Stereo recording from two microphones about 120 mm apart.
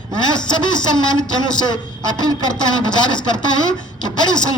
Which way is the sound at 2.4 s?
40° left (ahead or behind).